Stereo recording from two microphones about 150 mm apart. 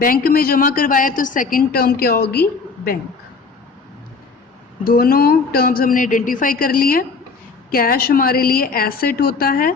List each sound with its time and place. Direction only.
0.0 s a woman's voice: 75° left (ahead or behind)
4.8 s a woman's voice: 85° left